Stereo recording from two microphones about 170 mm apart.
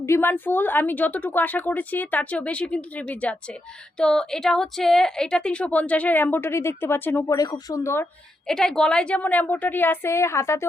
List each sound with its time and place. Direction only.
0.0 s a woman's voice: 15° left (ahead or behind)
8.4 s a woman's voice: 5° left (ahead or behind)